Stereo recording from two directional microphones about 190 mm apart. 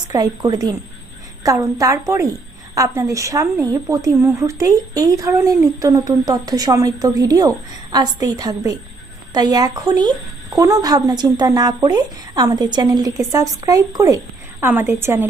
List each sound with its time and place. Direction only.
0.1 s a woman's voice: 20° right (ahead or behind)